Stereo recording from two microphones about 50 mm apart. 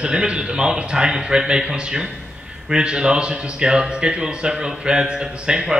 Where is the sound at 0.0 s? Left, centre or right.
Centre.